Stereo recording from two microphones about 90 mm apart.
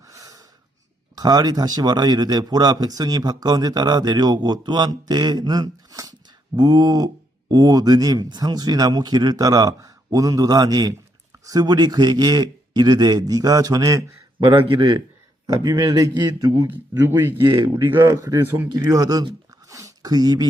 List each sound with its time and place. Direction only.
0.0 s snort: 40° right (ahead or behind)
1.1 s a man's voice: 45° right (ahead or behind)
14.4 s a man's voice: 75° right (ahead or behind)
15.5 s a man's voice: 40° right (ahead or behind)
16.6 s speech: 25° right (ahead or behind)
18.4 s speech: 20° right (ahead or behind)
18.9 s a man's voice: 45° right (ahead or behind)
19.5 s a sound: 40° right (ahead or behind)